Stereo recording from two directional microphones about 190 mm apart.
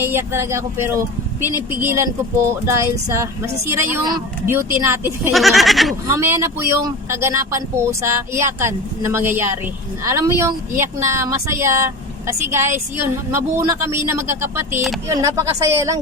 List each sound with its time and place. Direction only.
0.0 s speech: 10° right (ahead or behind)
5.3 s a sound: centre (ahead or behind)
6.1 s speech: 15° right (ahead or behind)